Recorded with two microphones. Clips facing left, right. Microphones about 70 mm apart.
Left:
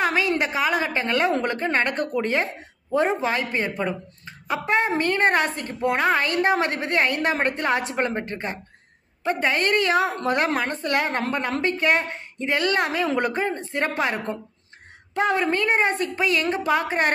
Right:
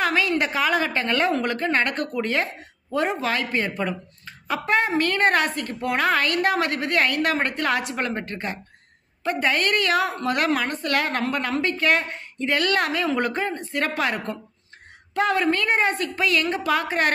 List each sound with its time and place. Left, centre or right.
0.0 s a woman's voice: left